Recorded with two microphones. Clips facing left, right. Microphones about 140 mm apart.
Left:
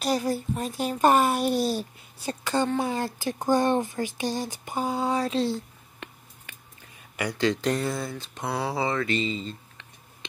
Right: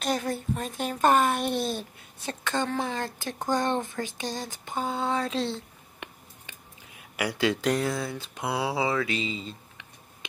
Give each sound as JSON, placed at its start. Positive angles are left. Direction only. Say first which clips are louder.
{"t": 0.0, "sound": "a woman's voice", "louder": "left 3 dB", "side_deg": 5}
{"t": 5.5, "sound": "a sound", "louder": "left 4 dB", "side_deg": -20}
{"t": 7.0, "sound": "a woman's voice", "louder": "even", "side_deg": -5}